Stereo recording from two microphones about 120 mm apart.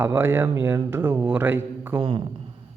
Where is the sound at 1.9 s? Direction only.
45° right (ahead or behind).